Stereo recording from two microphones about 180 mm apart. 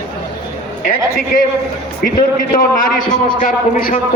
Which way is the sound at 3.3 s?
50° left (ahead or behind).